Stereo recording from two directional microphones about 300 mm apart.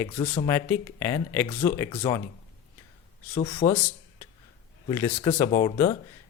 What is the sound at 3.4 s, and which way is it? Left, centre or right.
Speech, centre.